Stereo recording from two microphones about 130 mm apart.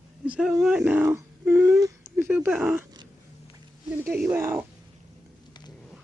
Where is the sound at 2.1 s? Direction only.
10° right (ahead or behind).